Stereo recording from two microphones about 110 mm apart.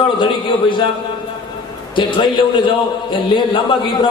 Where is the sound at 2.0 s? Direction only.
50° left (ahead or behind).